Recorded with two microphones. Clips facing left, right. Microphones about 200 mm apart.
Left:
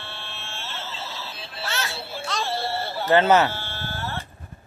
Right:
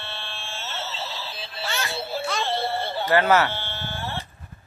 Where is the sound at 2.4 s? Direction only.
20° right (ahead or behind).